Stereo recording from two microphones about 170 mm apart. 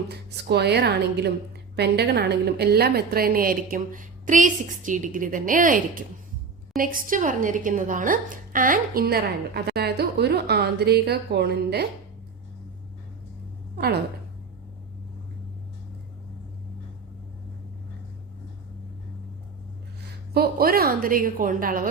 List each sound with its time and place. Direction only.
0.1 s a woman's voice: 75° right (ahead or behind)
20.3 s a woman's voice: 65° right (ahead or behind)